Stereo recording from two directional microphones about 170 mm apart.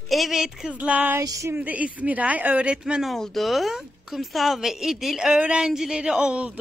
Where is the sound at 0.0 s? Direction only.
Centre (ahead or behind).